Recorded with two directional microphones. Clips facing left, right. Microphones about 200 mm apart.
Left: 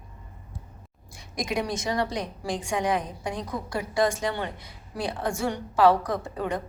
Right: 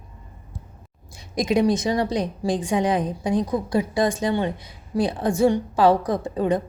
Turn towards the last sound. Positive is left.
turn(degrees=-25)  # may be behind; listen again after turning